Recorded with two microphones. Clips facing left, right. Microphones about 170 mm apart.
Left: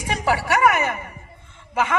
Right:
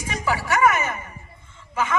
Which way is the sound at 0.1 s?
65° left (ahead or behind).